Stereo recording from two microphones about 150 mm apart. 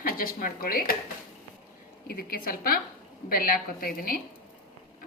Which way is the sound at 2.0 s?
80° left.